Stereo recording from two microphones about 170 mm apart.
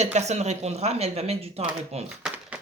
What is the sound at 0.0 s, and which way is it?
Speech, 40° right (ahead or behind).